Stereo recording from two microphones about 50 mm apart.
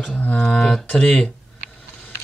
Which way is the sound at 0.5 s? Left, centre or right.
Centre.